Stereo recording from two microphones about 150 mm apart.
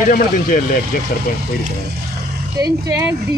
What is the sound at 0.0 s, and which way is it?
Speech, 65° left (ahead or behind).